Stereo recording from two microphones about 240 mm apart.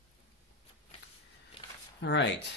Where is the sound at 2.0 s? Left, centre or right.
Left.